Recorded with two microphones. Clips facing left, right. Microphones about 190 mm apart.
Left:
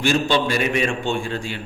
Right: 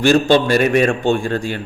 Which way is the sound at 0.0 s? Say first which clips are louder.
Right 7 dB; 45° right (ahead or behind).